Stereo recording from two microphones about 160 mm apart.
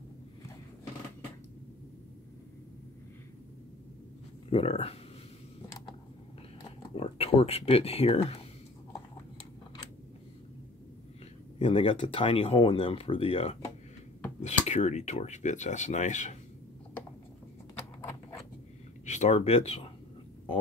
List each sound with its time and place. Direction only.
4.5 s speech: 35° left (ahead or behind)
7.0 s speech: 40° left (ahead or behind)
11.5 s speech: 35° left (ahead or behind)
14.4 s speech: 45° left (ahead or behind)
19.0 s speech: 45° left (ahead or behind)